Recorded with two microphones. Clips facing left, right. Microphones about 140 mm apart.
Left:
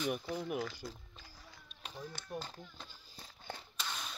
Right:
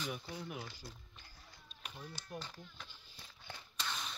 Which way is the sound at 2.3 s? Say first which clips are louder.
Left 4 dB; 35° left (ahead or behind).